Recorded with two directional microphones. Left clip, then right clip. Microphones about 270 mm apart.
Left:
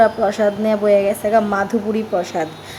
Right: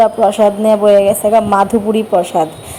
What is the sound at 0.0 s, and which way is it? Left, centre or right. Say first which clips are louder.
A woman's voice: right 5 dB; centre.